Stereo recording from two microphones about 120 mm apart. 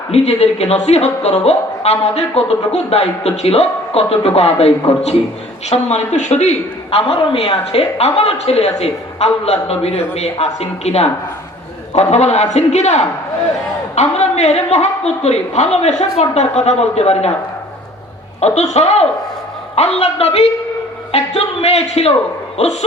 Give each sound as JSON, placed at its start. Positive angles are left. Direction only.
{"t": 0.1, "sound": "a woman's voice", "side_deg": 60}
{"t": 18.3, "sound": "a woman's voice", "side_deg": 70}